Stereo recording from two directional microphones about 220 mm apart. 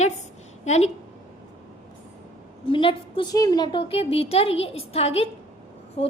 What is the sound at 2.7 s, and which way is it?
A woman's voice, 25° left (ahead or behind).